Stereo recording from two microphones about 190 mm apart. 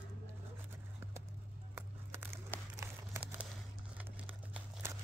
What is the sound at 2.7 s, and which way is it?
Crumpling, 10° right (ahead or behind).